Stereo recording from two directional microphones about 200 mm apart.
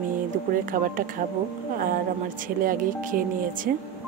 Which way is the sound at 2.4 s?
45° right (ahead or behind).